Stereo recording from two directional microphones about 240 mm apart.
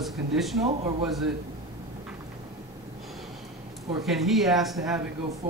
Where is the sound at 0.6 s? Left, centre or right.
Right.